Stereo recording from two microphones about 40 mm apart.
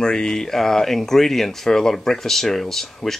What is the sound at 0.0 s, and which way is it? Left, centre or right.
Speech, centre.